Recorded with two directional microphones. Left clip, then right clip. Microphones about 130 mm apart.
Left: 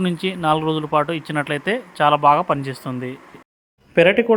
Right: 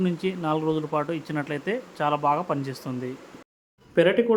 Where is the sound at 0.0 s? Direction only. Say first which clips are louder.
Left 6 dB; 35° left (ahead or behind).